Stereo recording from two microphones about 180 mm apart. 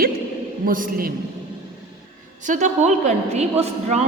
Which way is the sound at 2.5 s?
40° right (ahead or behind).